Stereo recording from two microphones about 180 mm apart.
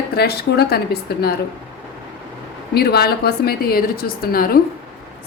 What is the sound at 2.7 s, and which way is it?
A woman's voice, 60° left (ahead or behind).